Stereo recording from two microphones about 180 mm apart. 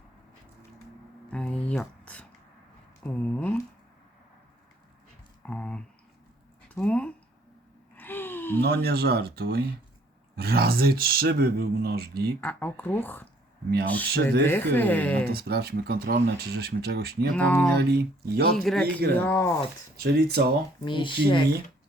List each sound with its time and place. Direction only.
1.3 s speech: 5° left (ahead or behind)
5.5 s a sound: 5° left (ahead or behind)
7.9 s gasp: 10° left (ahead or behind)
8.6 s speech: 60° right (ahead or behind)
12.4 s speech: 10° left (ahead or behind)
15.3 s speech: 60° right (ahead or behind)
17.3 s speech: 5° left (ahead or behind)
17.7 s speech: 60° right (ahead or behind)
18.5 s a man's voice: centre (ahead or behind)
20.0 s speech: 60° right (ahead or behind)
20.8 s speech: 25° left (ahead or behind)